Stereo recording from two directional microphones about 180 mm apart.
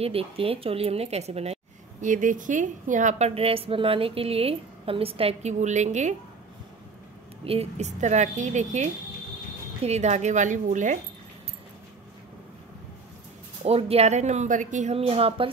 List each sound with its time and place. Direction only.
0.0 s a woman's voice: 30° right (ahead or behind)
7.4 s a woman's voice: 35° right (ahead or behind)
13.6 s a woman's voice: 30° right (ahead or behind)